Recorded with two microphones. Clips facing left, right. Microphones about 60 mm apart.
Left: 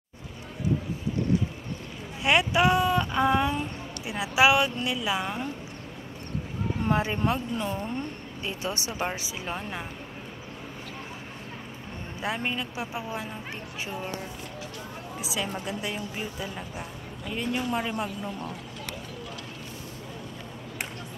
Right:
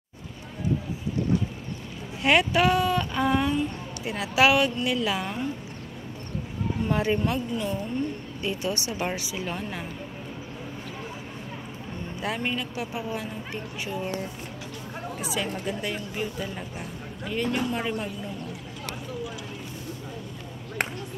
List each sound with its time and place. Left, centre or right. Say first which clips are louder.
2.2 s speech: right 1 dB; centre
6.8 s speech: right 1 dB; left
8.5 s speech: right 3 dB; left
12.2 s speech: right 1 dB; centre
15.1 s a woman's voice: right 1 dB; centre